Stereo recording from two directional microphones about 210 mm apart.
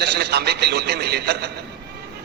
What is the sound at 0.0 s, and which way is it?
A man's voice, 50° right (ahead or behind).